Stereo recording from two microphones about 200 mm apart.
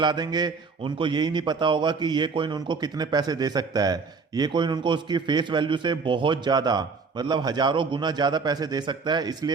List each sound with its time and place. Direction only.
0.0 s a man's voice: 20° right (ahead or behind)